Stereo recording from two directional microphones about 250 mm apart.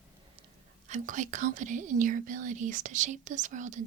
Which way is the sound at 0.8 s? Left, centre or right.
Right.